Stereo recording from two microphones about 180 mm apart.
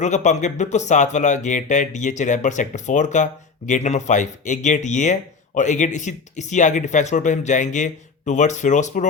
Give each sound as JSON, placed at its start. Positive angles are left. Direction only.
{"t": 0.0, "sound": "speech", "side_deg": 40}